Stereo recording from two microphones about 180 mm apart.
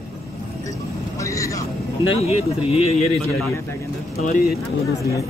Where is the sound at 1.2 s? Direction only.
15° left (ahead or behind).